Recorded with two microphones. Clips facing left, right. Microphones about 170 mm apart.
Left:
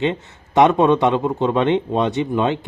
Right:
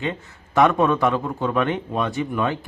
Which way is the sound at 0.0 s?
20° left (ahead or behind).